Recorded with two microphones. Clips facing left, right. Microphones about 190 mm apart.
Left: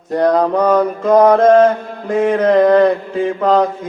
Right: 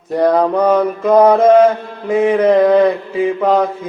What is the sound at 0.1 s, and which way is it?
Mantra, 5° right (ahead or behind).